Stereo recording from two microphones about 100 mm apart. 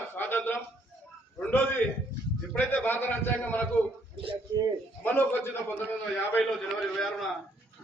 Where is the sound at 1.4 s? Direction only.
15° left (ahead or behind).